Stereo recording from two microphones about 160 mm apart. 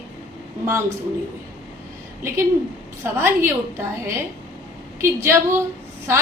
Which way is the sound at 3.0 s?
15° right (ahead or behind).